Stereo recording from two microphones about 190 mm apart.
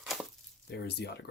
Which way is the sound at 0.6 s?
60° left (ahead or behind).